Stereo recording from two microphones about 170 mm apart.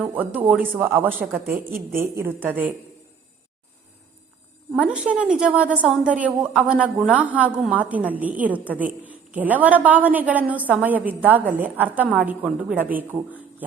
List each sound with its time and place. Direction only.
0.0 s a woman's voice: 10° right (ahead or behind)
1.5 s a woman's voice: 60° right (ahead or behind)
2.0 s a woman's voice: 15° right (ahead or behind)
4.7 s a woman's voice: 5° right (ahead or behind)